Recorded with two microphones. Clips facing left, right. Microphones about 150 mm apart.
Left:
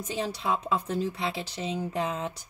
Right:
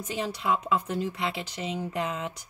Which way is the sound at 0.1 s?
30° left (ahead or behind).